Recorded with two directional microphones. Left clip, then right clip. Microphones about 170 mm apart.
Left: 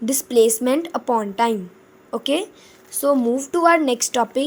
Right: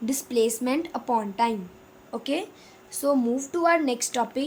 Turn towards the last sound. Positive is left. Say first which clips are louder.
# left 7 dB
turn(degrees=35)  # may be behind; listen again after turning